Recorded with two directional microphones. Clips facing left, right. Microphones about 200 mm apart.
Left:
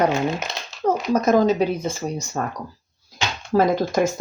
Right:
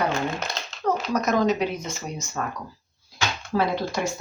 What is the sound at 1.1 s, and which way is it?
Speech, 30° left (ahead or behind).